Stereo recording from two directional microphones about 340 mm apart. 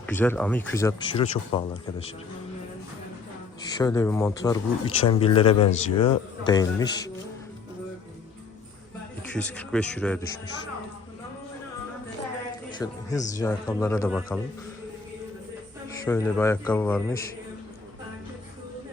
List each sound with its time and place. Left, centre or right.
0.0 s speech: centre
3.6 s speech: centre
9.3 s speech: centre
12.7 s music: centre
13.3 s speech: centre
16.0 s speech: centre